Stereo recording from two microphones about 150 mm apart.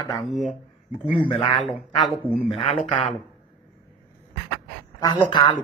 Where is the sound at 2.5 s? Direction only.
40° left (ahead or behind).